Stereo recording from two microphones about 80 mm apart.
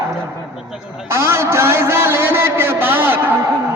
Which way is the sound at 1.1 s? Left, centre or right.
Right.